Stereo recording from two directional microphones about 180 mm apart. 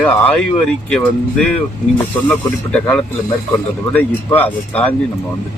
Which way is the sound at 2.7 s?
10° left (ahead or behind).